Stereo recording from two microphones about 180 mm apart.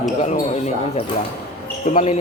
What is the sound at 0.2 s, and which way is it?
Speech, 40° left (ahead or behind).